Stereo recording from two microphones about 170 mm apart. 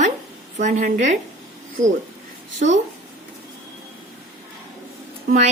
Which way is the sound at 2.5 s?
45° right (ahead or behind).